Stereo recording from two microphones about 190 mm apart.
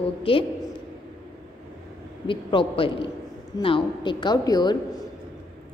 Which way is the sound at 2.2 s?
25° left (ahead or behind).